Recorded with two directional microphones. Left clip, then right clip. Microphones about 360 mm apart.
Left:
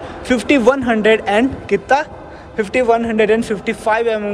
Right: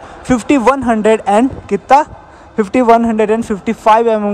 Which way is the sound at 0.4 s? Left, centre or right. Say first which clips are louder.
Right 1 dB; centre.